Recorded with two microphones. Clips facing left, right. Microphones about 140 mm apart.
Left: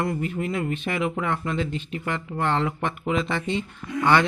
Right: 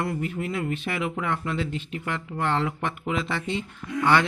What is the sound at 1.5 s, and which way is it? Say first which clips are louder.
Mantra: left 2 dB; 5° right (ahead or behind).